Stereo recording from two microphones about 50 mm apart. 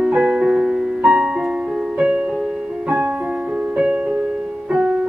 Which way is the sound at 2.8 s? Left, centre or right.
Right.